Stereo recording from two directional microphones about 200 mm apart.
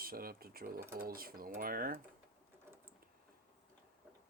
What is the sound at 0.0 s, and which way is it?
Speech, 45° right (ahead or behind).